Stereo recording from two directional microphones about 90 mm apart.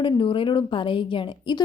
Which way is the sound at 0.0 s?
65° left (ahead or behind).